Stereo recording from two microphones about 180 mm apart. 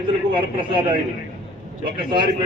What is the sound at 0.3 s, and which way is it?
A man's voice, 25° right (ahead or behind).